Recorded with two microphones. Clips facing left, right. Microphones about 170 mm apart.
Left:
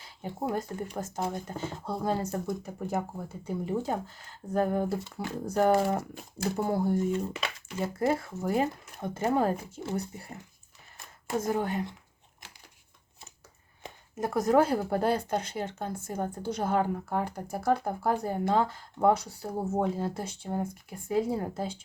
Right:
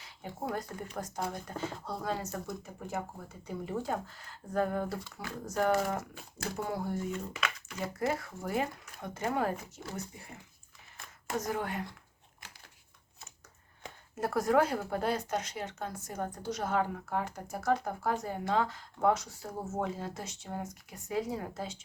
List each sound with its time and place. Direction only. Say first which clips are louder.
0.0 s speech: left 5 dB; 30° left (ahead or behind)
10.9 s speech: left 4 dB; 25° left (ahead or behind)
13.8 s speech: left 2 dB; 20° left (ahead or behind); by 21.8 s 35° left (ahead or behind)